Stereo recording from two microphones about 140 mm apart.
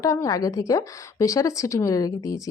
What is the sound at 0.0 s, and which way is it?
A woman's voice, 25° left (ahead or behind).